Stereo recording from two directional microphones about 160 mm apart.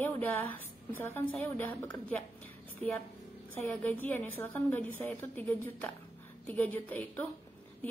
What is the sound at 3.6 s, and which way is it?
A woman's voice, 10° left (ahead or behind).